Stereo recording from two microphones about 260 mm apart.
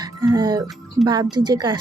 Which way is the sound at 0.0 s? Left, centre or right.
Centre.